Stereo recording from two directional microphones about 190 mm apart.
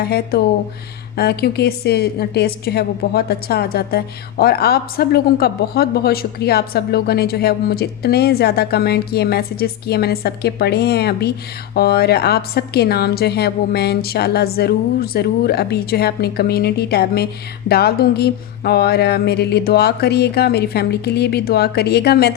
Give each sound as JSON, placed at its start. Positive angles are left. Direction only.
{"t": 0.0, "sound": "a woman's voice", "side_deg": 55}